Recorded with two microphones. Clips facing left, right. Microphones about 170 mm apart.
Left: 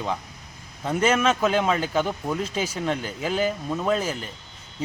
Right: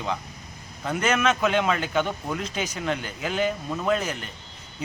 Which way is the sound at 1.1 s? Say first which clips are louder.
Left 1 dB; 30° left (ahead or behind).